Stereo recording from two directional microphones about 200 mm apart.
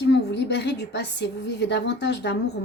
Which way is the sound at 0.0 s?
55° left (ahead or behind).